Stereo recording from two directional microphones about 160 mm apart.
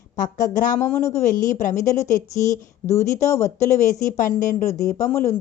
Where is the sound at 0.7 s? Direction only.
20° left (ahead or behind).